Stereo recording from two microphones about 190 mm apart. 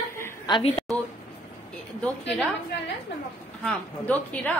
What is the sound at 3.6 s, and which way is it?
Speech, 5° left (ahead or behind).